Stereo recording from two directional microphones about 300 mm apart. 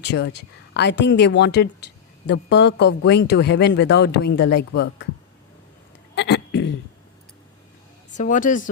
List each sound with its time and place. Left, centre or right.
0.0 s speech: left
6.1 s a sound: left
8.1 s a woman's voice: left